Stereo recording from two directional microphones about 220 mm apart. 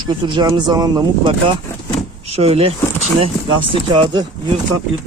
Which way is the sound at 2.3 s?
25° right (ahead or behind).